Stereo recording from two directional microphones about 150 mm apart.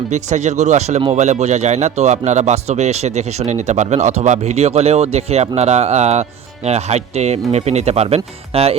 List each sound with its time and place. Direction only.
0.1 s speech: 50° right (ahead or behind)